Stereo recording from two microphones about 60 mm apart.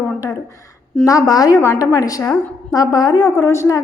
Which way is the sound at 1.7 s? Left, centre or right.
Left.